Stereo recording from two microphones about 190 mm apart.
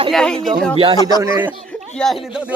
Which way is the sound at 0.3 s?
25° right (ahead or behind).